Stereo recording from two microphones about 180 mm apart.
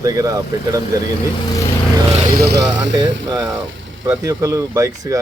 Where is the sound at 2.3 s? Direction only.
70° right (ahead or behind).